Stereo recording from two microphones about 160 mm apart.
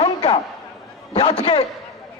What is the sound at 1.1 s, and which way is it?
Speech, 40° left (ahead or behind).